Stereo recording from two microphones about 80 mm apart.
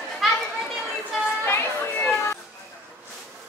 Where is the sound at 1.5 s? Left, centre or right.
Left.